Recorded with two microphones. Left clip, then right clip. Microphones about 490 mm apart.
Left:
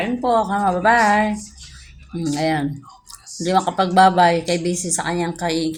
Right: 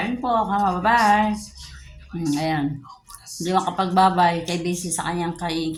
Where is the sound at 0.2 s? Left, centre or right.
Right.